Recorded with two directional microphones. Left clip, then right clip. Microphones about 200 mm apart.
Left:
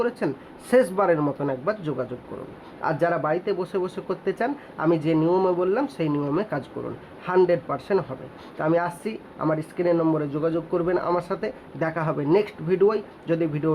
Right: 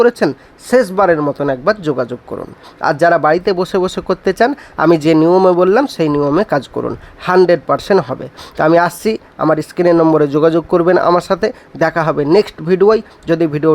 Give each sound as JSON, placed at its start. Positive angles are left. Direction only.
{"t": 0.0, "sound": "speech", "side_deg": -45}
{"t": 0.3, "sound": "speech", "side_deg": -25}
{"t": 2.8, "sound": "speech", "side_deg": -35}